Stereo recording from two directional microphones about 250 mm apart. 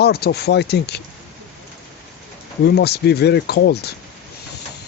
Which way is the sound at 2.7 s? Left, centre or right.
Left.